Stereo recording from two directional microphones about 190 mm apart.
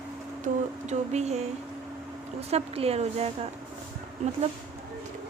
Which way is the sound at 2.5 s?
35° right (ahead or behind).